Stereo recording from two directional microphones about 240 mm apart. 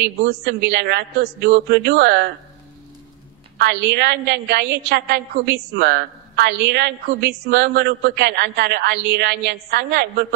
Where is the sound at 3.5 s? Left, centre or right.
Right.